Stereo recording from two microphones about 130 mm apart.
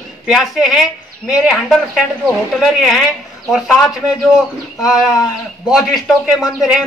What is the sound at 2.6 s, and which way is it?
Speech, centre (ahead or behind).